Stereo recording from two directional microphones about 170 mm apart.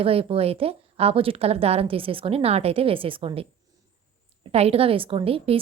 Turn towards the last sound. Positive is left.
turn(degrees=-35)  # may be behind; listen again after turning